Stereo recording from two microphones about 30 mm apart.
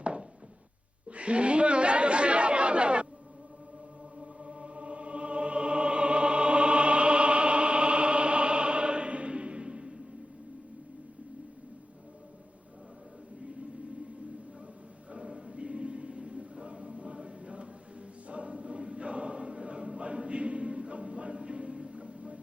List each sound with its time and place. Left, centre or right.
0.0 s a sound: right
1.1 s chatter: right
4.2 s music: right
15.1 s choir: right